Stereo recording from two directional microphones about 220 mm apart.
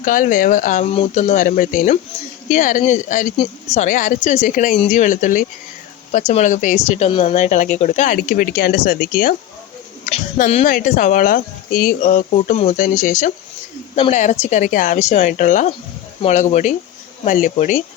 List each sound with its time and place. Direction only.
0.0 s a woman's voice: 40° left (ahead or behind)